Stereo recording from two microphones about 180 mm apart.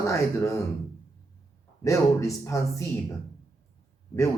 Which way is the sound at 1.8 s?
15° left (ahead or behind).